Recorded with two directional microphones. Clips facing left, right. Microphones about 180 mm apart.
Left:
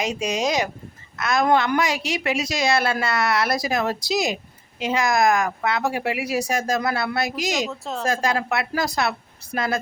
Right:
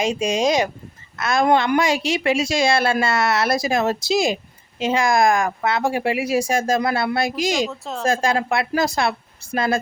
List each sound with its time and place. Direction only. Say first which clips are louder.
0.0 s a woman's voice: right 4 dB; 25° right (ahead or behind)
7.7 s speech: even; centre (ahead or behind)
8.0 s a woman's voice: right 3 dB; 25° right (ahead or behind)